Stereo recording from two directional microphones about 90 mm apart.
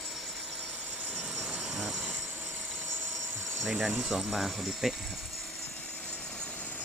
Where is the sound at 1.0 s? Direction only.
Centre (ahead or behind).